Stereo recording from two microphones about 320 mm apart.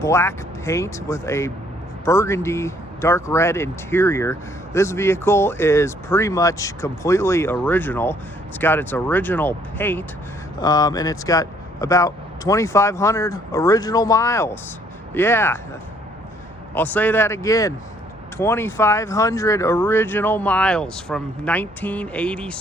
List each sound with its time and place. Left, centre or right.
0.0 s speech: centre
16.7 s speech: centre